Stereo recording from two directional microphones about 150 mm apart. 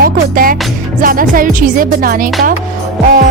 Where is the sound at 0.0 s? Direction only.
70° right (ahead or behind).